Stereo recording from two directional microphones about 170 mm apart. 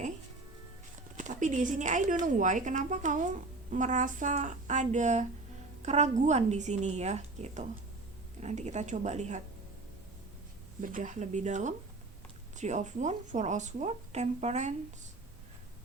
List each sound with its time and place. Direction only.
1.1 s speech: 45° right (ahead or behind)
10.8 s speech: 45° right (ahead or behind)